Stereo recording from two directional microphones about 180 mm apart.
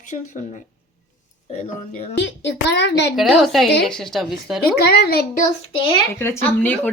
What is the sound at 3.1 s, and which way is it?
Speech, centre (ahead or behind).